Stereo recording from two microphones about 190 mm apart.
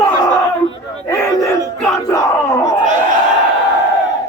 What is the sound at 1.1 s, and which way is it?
Crowd, 15° left (ahead or behind).